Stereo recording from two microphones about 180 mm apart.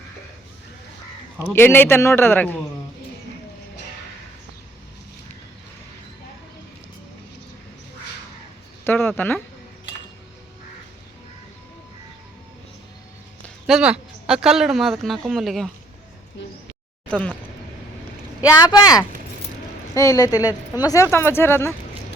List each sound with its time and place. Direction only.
1.4 s a man's voice: 10° left (ahead or behind)
8.8 s speech: 10° left (ahead or behind)
13.7 s speech: 5° right (ahead or behind)
17.1 s speech: 5° left (ahead or behind)
18.4 s a man's voice: 20° left (ahead or behind)